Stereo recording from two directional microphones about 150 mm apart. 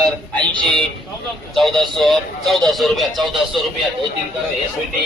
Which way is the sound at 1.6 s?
Centre (ahead or behind).